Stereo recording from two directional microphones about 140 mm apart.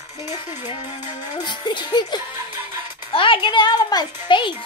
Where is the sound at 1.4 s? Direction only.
35° left (ahead or behind).